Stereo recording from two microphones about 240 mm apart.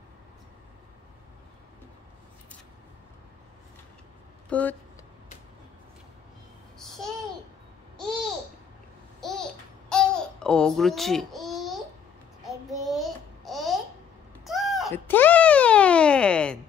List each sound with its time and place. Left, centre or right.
4.5 s speech: centre
9.2 s babbling: centre
12.4 s a sound: centre